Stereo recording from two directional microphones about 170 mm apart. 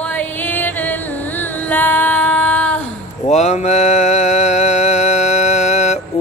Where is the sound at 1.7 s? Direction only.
10° left (ahead or behind).